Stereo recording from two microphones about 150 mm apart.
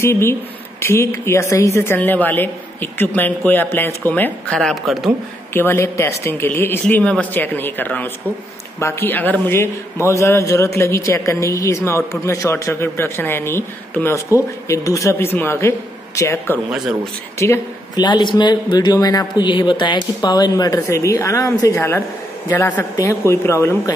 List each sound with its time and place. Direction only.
0.0 s speech: 15° left (ahead or behind); by 5.1 s centre (ahead or behind)
5.5 s a woman's voice: 15° left (ahead or behind)
16.7 s a man's voice: 5° right (ahead or behind)
17.4 s a woman's voice: 25° left (ahead or behind)